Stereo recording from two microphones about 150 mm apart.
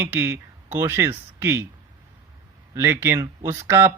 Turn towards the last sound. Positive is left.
turn(degrees=-15)  # may be behind; listen again after turning